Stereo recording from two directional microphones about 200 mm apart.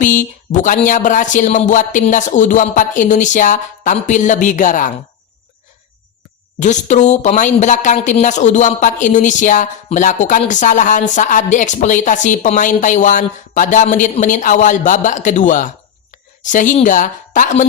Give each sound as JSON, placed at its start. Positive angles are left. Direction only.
{"t": 0.0, "sound": "a woman's voice", "side_deg": 40}
{"t": 6.6, "sound": "a woman's voice", "side_deg": 35}